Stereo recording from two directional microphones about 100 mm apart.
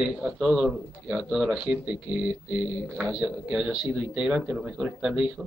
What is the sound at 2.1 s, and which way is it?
Speech, 50° left (ahead or behind).